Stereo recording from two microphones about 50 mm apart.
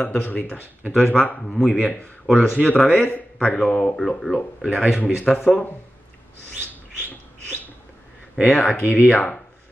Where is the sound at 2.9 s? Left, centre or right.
Left.